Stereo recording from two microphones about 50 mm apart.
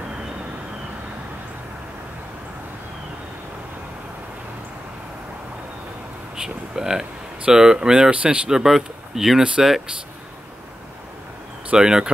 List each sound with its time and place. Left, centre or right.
6.3 s speech: centre
8.5 s speech: centre
11.7 s speech: centre